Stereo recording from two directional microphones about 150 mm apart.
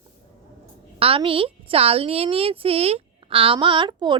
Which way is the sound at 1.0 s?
40° right (ahead or behind).